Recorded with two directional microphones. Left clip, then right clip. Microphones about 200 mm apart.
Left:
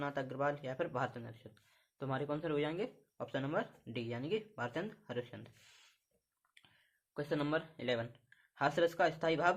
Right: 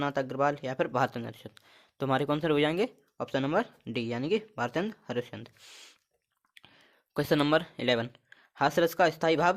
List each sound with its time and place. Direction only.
0.0 s speech: 40° right (ahead or behind)
7.1 s speech: 45° right (ahead or behind)